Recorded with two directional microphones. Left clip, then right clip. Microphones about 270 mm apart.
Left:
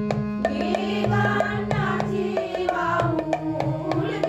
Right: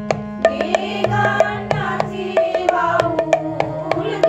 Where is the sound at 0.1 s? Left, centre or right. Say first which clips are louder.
Right 11 dB; right.